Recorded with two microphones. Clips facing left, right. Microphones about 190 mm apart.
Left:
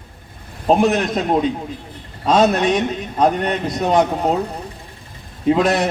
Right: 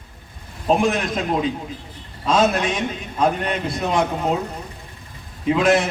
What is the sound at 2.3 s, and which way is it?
A man's voice, 40° left (ahead or behind).